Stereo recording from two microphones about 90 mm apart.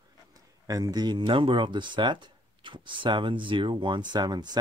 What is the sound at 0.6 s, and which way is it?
Speech, 40° right (ahead or behind).